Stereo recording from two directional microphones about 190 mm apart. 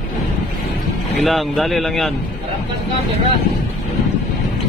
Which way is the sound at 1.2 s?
Centre (ahead or behind).